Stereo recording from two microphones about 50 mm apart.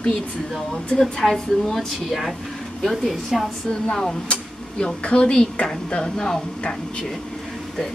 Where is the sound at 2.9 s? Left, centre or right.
Centre.